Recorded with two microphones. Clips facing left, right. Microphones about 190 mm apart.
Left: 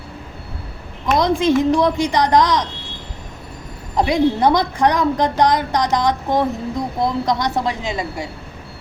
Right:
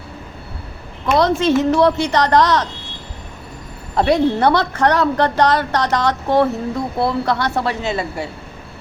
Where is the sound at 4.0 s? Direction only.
15° left (ahead or behind).